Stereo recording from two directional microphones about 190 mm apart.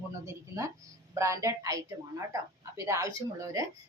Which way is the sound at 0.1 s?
15° right (ahead or behind).